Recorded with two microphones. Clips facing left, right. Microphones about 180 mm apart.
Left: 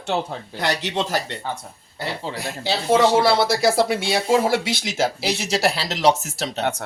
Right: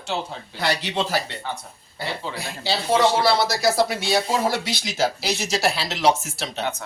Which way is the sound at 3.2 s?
25° left (ahead or behind).